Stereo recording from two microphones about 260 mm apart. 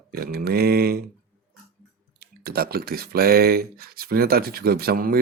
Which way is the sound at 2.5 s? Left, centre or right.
Right.